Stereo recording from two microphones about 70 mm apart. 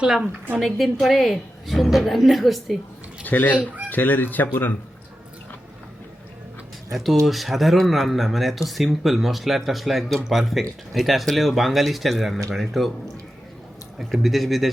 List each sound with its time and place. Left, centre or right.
0.6 s speech: centre
3.2 s speech: left
6.9 s speech: centre
14.0 s speech: centre